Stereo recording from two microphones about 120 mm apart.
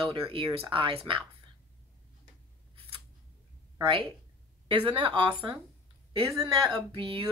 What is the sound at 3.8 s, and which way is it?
Speech, 45° right (ahead or behind).